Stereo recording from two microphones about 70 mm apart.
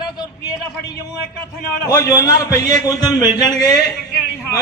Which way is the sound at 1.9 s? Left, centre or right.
Left.